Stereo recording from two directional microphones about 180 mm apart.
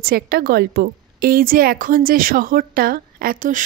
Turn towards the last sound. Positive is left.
turn(degrees=-45)  # may be behind; listen again after turning